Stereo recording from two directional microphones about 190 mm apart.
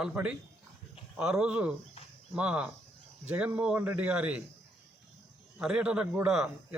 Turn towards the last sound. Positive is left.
turn(degrees=-5)  # may be behind; listen again after turning